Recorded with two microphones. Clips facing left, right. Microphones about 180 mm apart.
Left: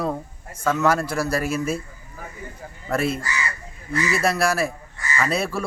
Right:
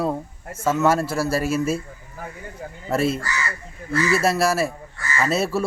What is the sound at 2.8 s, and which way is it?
Speech, 25° right (ahead or behind).